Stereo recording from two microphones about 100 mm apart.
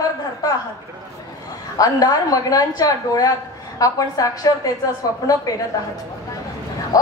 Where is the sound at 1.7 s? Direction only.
40° left (ahead or behind).